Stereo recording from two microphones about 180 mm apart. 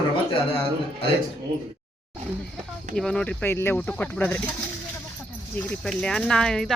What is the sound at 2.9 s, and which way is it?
Speech, 5° left (ahead or behind).